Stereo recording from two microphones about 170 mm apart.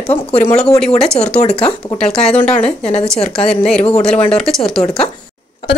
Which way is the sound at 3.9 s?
5° left (ahead or behind).